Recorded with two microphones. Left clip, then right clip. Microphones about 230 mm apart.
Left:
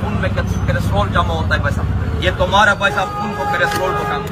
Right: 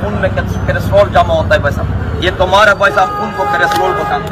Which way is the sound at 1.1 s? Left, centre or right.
Left.